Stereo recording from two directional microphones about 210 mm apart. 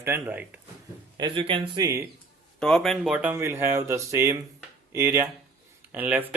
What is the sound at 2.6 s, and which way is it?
Speech, centre (ahead or behind).